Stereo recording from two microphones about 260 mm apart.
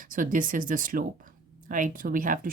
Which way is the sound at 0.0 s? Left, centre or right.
Right.